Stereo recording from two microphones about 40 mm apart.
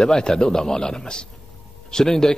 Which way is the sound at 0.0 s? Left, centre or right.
Centre.